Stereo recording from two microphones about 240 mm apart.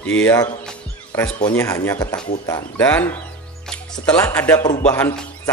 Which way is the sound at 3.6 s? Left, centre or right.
Centre.